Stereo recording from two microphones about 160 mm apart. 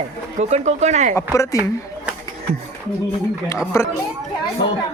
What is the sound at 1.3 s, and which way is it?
Speech, 20° left (ahead or behind).